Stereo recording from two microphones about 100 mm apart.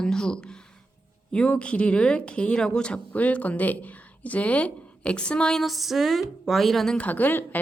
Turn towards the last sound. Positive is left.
turn(degrees=20)  # may be behind; listen again after turning